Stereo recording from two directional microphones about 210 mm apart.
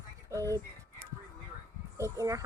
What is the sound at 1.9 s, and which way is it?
Speech, 15° right (ahead or behind).